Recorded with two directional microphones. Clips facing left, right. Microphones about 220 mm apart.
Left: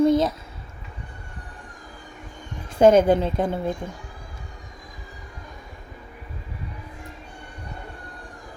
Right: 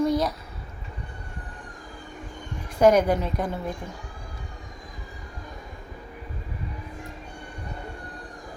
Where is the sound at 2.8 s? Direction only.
25° left (ahead or behind).